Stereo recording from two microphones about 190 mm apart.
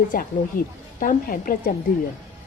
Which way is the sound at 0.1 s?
45° left (ahead or behind).